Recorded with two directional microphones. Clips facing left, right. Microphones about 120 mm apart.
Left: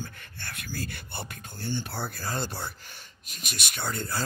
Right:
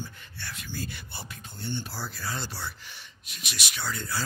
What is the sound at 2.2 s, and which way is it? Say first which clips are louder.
Speech: left 2 dB; 45° left (ahead or behind).